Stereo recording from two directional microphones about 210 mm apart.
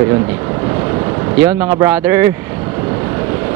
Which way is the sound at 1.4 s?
10° right (ahead or behind).